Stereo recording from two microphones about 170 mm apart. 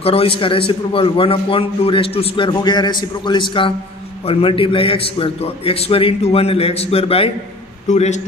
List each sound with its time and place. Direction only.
0.0 s a man's voice: 35° left (ahead or behind)